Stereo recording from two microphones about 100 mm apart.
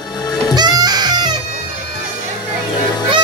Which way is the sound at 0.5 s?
45° right (ahead or behind).